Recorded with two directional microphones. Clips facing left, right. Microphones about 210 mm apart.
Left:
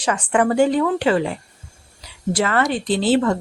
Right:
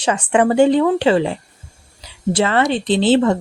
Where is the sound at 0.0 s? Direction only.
25° right (ahead or behind).